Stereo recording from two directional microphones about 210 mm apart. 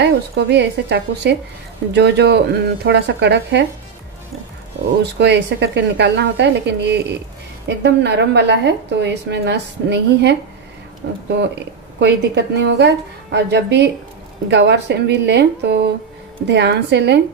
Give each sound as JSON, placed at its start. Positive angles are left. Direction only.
{"t": 0.0, "sound": "a woman's voice", "side_deg": -55}
{"t": 5.2, "sound": "a woman's voice", "side_deg": -55}